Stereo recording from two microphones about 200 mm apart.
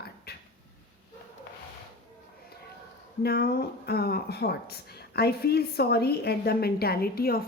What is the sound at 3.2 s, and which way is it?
A woman's voice, 50° left (ahead or behind).